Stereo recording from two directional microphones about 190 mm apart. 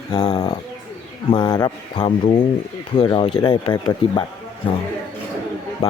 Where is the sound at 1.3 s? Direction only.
20° left (ahead or behind).